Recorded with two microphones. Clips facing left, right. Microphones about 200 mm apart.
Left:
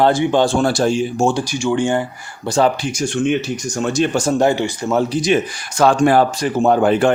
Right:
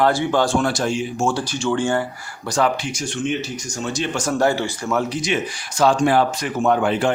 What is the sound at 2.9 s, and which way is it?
Speech, 45° left (ahead or behind).